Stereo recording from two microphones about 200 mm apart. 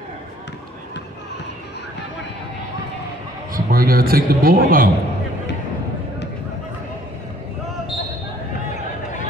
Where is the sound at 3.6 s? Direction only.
45° right (ahead or behind).